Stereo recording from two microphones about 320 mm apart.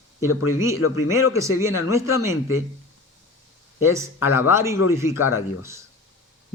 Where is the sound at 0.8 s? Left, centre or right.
Left.